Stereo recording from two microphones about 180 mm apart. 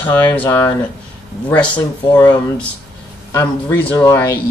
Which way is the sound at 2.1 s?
20° left (ahead or behind).